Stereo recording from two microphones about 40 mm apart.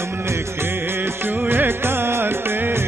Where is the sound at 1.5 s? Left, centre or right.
Right.